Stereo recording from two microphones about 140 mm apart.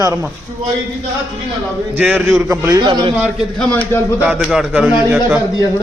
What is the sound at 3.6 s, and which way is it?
Speech, 10° left (ahead or behind).